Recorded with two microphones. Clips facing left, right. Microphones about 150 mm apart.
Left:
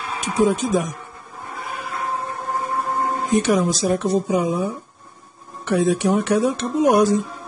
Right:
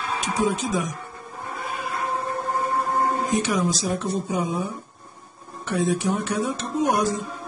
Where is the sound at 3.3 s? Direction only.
55° left (ahead or behind).